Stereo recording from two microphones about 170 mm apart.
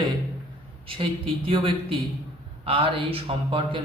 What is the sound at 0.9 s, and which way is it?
A man's voice, 30° right (ahead or behind).